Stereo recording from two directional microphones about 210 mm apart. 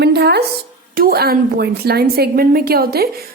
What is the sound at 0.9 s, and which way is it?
A woman's voice, 45° right (ahead or behind).